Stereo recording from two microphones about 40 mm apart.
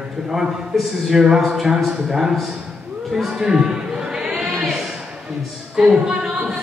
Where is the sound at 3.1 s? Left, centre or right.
Centre.